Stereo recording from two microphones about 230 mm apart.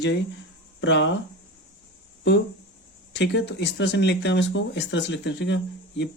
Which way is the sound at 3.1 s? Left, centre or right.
Left.